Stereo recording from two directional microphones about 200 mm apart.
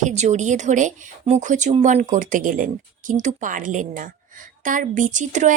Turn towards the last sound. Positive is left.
turn(degrees=-40)  # may be behind; listen again after turning